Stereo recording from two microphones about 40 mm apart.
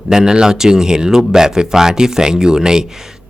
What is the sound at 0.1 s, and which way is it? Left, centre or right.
A man's voice, centre.